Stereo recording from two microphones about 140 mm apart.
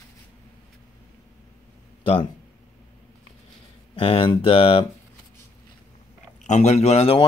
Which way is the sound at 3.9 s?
40° left (ahead or behind).